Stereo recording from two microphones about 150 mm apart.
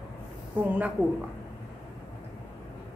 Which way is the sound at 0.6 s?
10° right (ahead or behind).